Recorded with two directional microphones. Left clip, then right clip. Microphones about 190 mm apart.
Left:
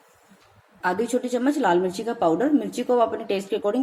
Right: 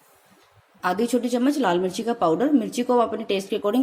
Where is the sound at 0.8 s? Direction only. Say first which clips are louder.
Right 1 dB; 35° right (ahead or behind).